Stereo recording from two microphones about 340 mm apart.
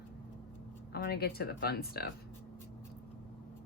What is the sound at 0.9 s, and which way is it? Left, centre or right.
A woman's voice, left.